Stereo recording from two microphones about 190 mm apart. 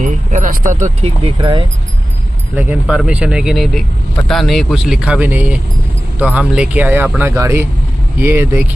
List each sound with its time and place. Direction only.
0.0 s speech: 45° right (ahead or behind); by 1.7 s 25° right (ahead or behind)
2.5 s speech: 10° right (ahead or behind)